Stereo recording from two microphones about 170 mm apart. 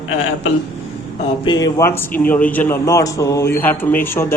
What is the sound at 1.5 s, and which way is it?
A man's voice, 25° left (ahead or behind).